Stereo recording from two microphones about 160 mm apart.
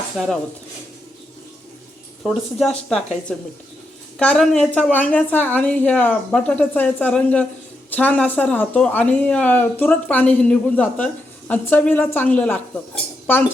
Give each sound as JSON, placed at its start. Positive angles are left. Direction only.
{"t": 0.2, "sound": "speech", "side_deg": 0}
{"t": 2.2, "sound": "speech", "side_deg": 0}